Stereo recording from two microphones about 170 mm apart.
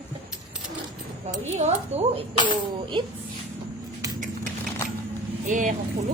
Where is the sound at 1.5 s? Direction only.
40° right (ahead or behind).